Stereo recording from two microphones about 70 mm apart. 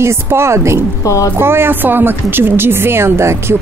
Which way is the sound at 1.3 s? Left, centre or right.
Right.